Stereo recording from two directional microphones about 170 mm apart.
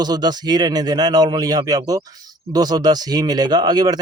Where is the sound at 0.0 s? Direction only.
25° right (ahead or behind).